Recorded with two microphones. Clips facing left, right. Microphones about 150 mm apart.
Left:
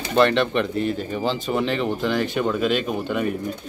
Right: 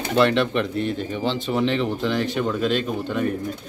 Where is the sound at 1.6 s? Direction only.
5° left (ahead or behind).